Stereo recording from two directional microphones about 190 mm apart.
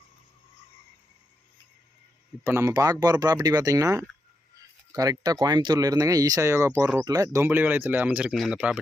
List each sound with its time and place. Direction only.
2.4 s speech: 15° right (ahead or behind)